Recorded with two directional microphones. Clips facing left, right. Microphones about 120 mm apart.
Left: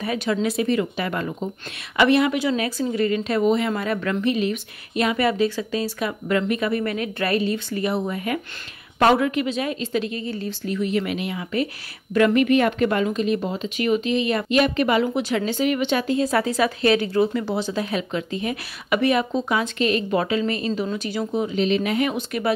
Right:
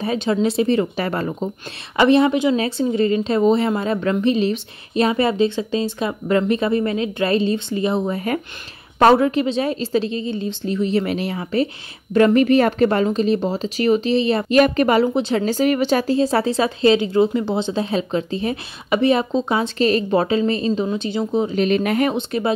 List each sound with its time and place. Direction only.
0.0 s a woman's voice: 30° right (ahead or behind)
14.5 s a woman's voice: 40° right (ahead or behind)
15.1 s speech: 30° right (ahead or behind)
15.4 s speech: 40° right (ahead or behind)
21.5 s speech: 50° right (ahead or behind)
22.1 s speech: 25° right (ahead or behind)